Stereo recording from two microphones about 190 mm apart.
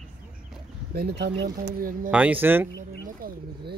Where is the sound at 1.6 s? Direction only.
45° right (ahead or behind).